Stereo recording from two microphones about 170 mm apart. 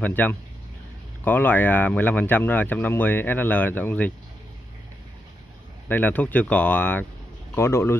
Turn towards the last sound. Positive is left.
turn(degrees=15)  # may be behind; listen again after turning